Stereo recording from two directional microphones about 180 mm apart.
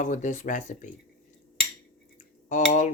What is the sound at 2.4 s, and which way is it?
Cutlery, 40° left (ahead or behind).